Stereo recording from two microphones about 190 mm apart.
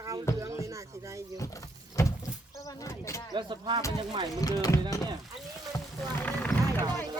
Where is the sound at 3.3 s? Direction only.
25° right (ahead or behind).